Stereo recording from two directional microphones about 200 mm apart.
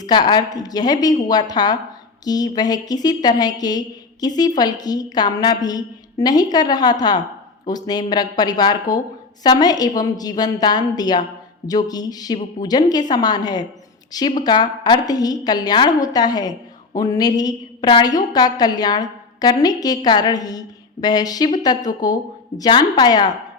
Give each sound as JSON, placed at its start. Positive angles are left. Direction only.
{"t": 0.0, "sound": "a woman's voice", "side_deg": 20}